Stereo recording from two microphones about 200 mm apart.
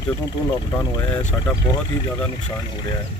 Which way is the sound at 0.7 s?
20° left (ahead or behind).